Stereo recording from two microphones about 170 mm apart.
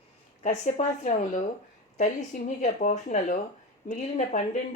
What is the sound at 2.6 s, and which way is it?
Speech, 45° left (ahead or behind).